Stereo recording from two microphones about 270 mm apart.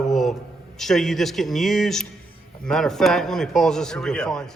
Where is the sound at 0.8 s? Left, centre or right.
Centre.